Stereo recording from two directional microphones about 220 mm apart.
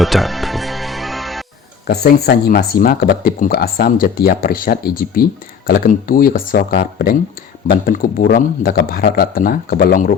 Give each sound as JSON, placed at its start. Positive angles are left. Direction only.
{"t": 0.0, "sound": "music", "side_deg": 0}
{"t": 1.9, "sound": "speech", "side_deg": 45}